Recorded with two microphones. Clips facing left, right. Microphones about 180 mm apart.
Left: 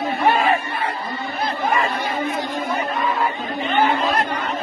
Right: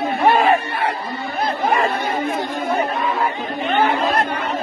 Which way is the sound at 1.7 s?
50° right (ahead or behind).